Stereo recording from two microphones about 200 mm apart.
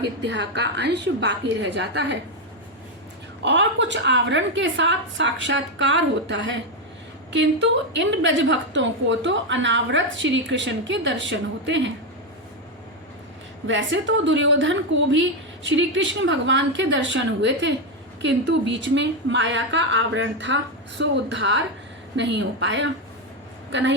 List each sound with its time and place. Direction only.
0.3 s a woman's voice: 60° right (ahead or behind)
3.4 s a woman's voice: 65° right (ahead or behind)
13.7 s a woman's voice: 65° right (ahead or behind)